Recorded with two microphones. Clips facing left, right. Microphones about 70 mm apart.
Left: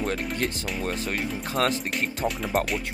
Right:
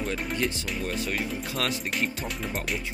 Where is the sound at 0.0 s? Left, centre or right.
Left.